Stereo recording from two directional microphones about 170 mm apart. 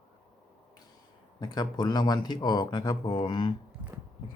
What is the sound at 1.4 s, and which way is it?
Speech, 25° left (ahead or behind).